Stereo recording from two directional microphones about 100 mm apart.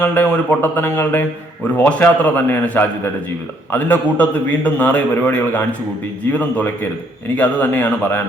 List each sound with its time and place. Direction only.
0.0 s a man's voice: 15° left (ahead or behind)